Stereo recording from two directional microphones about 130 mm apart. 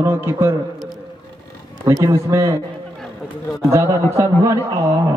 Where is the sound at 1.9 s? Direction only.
25° right (ahead or behind).